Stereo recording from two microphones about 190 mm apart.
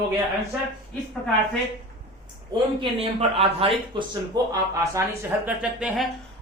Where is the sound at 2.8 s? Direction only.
30° right (ahead or behind).